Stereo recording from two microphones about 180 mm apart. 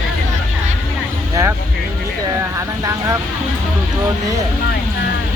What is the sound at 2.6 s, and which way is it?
Speech, 15° right (ahead or behind).